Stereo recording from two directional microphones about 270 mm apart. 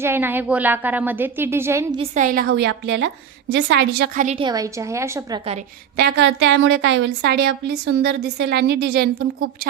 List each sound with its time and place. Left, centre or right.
0.0 s a woman's voice: centre
2.1 s a woman's voice: right; by 5.4 s centre
6.0 s a woman's voice: right